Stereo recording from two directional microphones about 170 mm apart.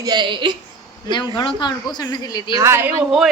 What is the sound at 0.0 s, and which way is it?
Speech, 25° right (ahead or behind).